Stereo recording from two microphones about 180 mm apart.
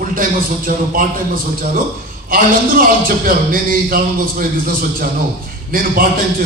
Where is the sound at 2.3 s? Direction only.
50° right (ahead or behind).